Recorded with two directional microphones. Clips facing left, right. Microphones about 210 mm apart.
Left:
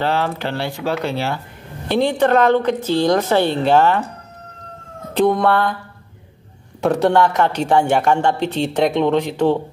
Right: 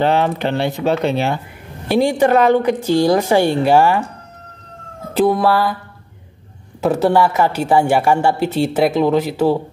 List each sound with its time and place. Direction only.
0.0 s a woman's voice: 20° right (ahead or behind)
5.1 s speech: 5° right (ahead or behind)
6.8 s a woman's voice: 5° right (ahead or behind)